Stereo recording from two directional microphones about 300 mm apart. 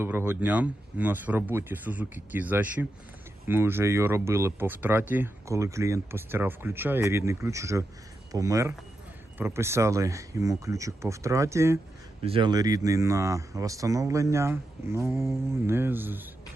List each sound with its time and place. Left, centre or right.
0.0 s speech: centre